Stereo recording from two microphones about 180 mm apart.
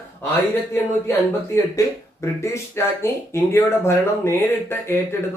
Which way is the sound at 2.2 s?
15° left (ahead or behind).